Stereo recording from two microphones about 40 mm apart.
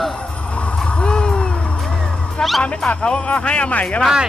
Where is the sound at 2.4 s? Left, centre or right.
Centre.